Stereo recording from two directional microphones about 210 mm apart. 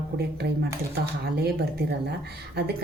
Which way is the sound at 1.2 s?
50° right (ahead or behind).